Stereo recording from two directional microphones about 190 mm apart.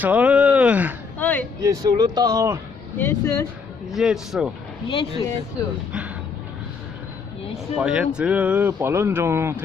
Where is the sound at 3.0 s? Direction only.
15° left (ahead or behind).